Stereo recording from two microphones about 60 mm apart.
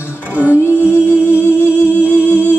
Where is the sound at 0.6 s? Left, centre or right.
Left.